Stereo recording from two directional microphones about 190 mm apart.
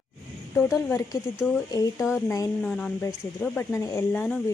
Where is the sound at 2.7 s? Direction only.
5° left (ahead or behind).